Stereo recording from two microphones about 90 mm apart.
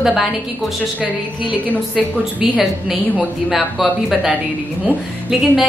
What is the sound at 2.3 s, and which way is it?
Speech, 15° right (ahead or behind).